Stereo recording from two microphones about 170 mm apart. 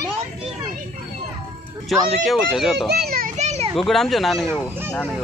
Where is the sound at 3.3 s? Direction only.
40° right (ahead or behind).